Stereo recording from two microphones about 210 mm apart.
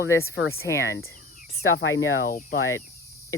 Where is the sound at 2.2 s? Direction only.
40° left (ahead or behind).